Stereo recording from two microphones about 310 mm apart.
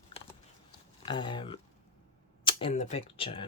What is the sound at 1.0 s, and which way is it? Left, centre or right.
Speech, centre.